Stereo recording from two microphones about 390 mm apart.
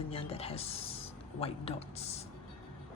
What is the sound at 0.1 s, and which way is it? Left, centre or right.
Speech, centre.